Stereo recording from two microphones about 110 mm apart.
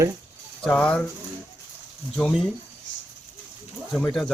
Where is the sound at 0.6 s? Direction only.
10° left (ahead or behind).